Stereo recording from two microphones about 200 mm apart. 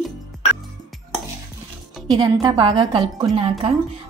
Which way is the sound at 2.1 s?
20° right (ahead or behind).